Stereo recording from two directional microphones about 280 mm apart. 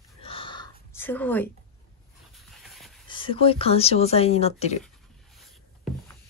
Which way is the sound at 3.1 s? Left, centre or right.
Centre.